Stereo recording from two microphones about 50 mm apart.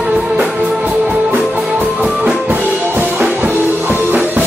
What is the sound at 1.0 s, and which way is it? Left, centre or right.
Music, right.